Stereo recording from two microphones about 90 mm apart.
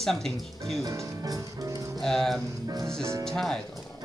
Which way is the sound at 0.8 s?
35° right (ahead or behind).